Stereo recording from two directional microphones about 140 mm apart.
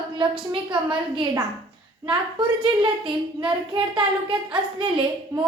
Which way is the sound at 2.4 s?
35° right (ahead or behind).